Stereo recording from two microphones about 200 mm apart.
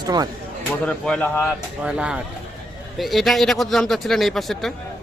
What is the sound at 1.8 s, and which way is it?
Speech, 5° right (ahead or behind).